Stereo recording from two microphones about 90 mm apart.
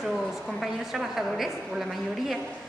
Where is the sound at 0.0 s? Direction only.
Centre (ahead or behind).